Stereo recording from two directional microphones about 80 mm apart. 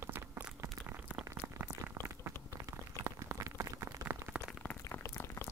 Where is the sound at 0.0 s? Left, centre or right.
Right.